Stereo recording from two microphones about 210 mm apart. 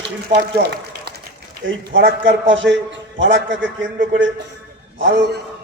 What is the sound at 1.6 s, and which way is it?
A man's voice, 60° right (ahead or behind).